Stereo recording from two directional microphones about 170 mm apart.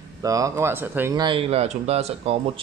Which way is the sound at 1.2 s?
30° right (ahead or behind).